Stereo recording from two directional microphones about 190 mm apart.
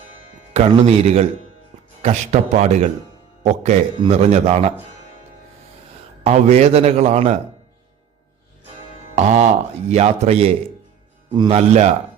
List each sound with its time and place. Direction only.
0.5 s a man's voice: 35° right (ahead or behind)
6.2 s a man's voice: 35° right (ahead or behind)
9.1 s a man's voice: 40° right (ahead or behind)
11.5 s a man's voice: 35° right (ahead or behind)